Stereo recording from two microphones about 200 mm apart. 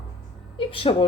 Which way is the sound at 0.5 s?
25° left (ahead or behind).